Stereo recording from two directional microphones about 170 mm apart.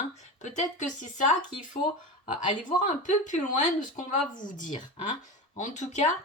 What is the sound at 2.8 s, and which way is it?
Speech, 45° left (ahead or behind).